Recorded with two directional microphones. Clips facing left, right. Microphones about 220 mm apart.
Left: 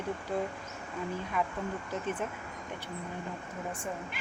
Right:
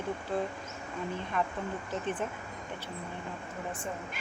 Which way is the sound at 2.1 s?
5° left (ahead or behind).